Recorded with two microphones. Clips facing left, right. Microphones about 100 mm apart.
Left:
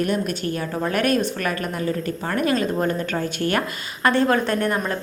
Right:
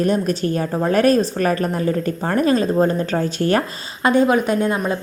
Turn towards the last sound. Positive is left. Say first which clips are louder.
# right 3 dB
turn(degrees=-15)  # may be behind; listen again after turning